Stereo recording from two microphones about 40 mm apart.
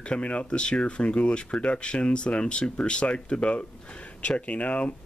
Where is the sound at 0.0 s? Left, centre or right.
Left.